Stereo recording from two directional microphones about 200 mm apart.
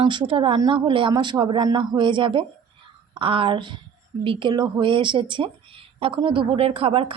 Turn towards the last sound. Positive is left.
turn(degrees=-30)  # may be behind; listen again after turning